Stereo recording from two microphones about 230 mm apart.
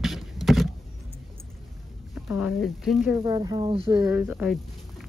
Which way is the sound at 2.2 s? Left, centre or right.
Centre.